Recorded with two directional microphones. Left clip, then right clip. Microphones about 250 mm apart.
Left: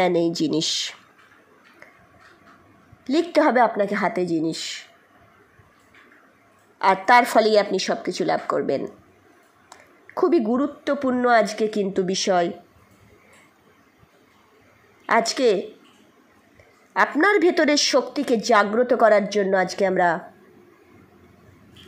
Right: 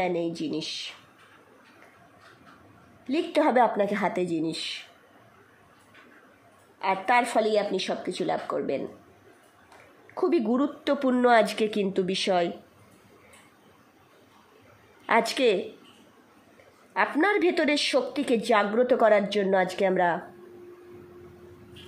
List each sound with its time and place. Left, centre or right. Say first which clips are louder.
0.0 s a woman's voice: left 8 dB; centre
3.1 s a woman's voice: left 5 dB; centre
6.8 s a woman's voice: left 8 dB; centre
10.1 s a woman's voice: left 5 dB; centre
15.0 s a woman's voice: left 4 dB; centre
16.9 s a woman's voice: left 6 dB; centre